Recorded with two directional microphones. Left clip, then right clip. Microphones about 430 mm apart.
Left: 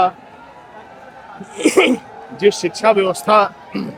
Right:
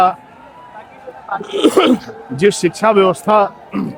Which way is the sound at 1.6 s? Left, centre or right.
Right.